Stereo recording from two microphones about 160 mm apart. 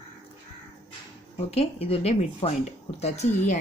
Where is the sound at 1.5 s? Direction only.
40° left (ahead or behind).